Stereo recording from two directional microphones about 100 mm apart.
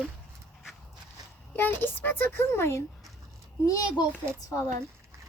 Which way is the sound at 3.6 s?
35° left (ahead or behind).